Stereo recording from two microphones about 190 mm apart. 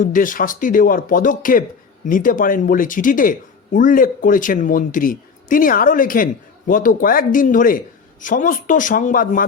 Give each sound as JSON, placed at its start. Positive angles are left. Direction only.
{"t": 0.0, "sound": "speech", "side_deg": 45}